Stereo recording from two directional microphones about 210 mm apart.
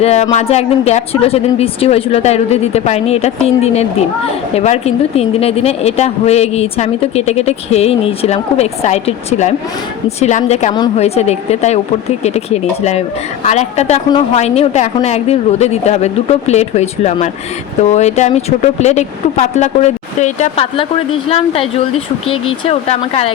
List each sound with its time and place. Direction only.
0.0 s speech: 30° left (ahead or behind)